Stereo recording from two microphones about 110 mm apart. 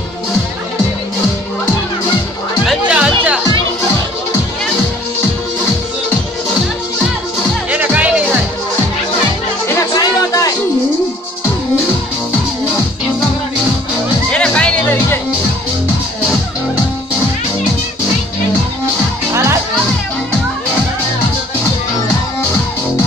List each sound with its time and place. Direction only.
2.9 s music: 10° right (ahead or behind)
7.7 s music: 15° right (ahead or behind)
9.9 s a sound: 30° left (ahead or behind)
14.3 s music: 10° left (ahead or behind)
19.3 s music: 25° right (ahead or behind)